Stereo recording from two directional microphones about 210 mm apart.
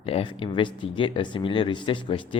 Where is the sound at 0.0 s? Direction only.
25° left (ahead or behind).